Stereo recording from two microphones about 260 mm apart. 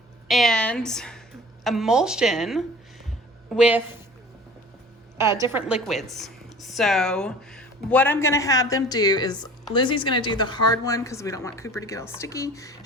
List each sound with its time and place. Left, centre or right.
0.3 s a woman's voice: centre
5.1 s a woman's voice: centre